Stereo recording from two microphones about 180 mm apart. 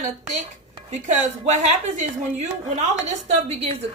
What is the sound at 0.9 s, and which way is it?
A woman's voice, 40° right (ahead or behind).